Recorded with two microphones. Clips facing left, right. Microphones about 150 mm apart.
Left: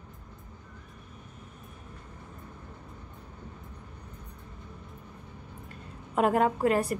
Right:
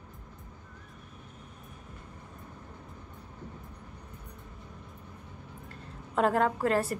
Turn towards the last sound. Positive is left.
turn(degrees=15)  # may be behind; listen again after turning